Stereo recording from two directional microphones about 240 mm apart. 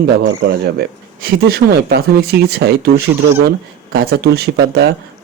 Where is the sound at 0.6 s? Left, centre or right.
Right.